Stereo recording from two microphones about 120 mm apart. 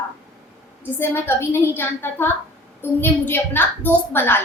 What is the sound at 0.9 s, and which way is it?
A woman's voice, 20° left (ahead or behind).